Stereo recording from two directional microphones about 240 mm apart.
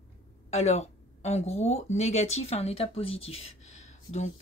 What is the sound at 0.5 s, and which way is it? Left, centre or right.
Speech, left.